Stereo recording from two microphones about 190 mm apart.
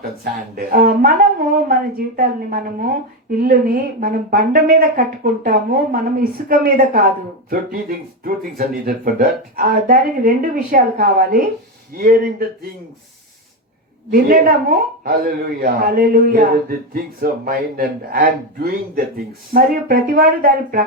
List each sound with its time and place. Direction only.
0.5 s speech: 50° right (ahead or behind)
4.0 s speech: 50° right (ahead or behind)
14.1 s speech: 50° right (ahead or behind)